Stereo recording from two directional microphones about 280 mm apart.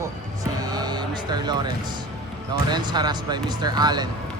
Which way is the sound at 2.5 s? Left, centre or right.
Centre.